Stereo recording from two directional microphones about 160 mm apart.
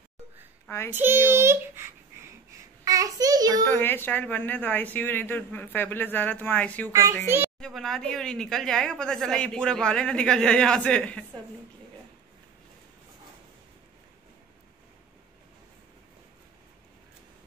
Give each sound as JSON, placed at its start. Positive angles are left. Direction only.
{"t": 0.9, "sound": "a child's voice", "side_deg": -15}
{"t": 3.6, "sound": "speech", "side_deg": 10}
{"t": 6.9, "sound": "a child's voice", "side_deg": -20}
{"t": 7.6, "sound": "speech", "side_deg": 0}